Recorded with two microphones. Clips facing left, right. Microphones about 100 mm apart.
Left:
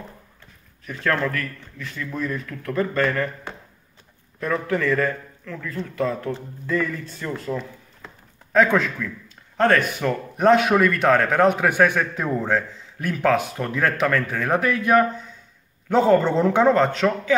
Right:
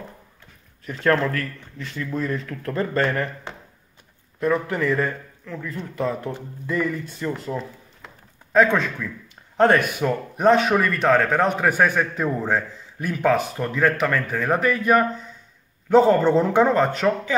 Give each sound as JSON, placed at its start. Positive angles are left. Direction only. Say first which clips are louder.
{"t": 0.8, "sound": "a man's voice", "louder": "right 3 dB", "side_deg": -25}
{"t": 8.5, "sound": "a man's voice", "louder": "even", "side_deg": 0}
{"t": 9.9, "sound": "a man's voice", "louder": "right 1 dB", "side_deg": -5}